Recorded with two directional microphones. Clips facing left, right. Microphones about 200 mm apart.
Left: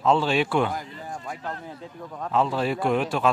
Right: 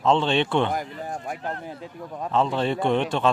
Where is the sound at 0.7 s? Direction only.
60° right (ahead or behind).